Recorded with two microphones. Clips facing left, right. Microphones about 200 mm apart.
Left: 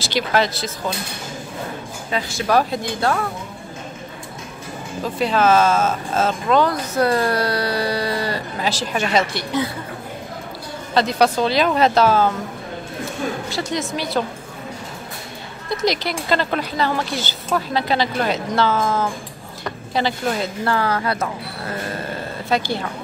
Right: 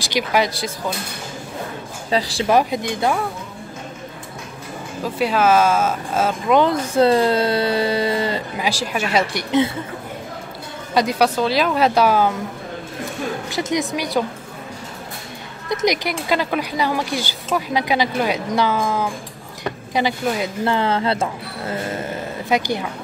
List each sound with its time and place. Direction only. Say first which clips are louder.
0.0 s speech: even; 15° right (ahead or behind)
2.0 s speech: right 4 dB; 35° right (ahead or behind)
2.4 s speech: even; 15° right (ahead or behind)
5.0 s speech: even; 10° right (ahead or behind)
6.6 s speech: right 3 dB; 25° right (ahead or behind)
8.5 s speech: even; 10° right (ahead or behind)
11.0 s speech: even; 10° right (ahead or behind)
13.5 s speech: right 2 dB; 20° right (ahead or behind)
15.8 s speech: right 1 dB; 15° right (ahead or behind)